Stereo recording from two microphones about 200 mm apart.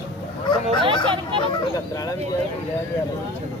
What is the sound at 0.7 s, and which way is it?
Speech, 25° right (ahead or behind).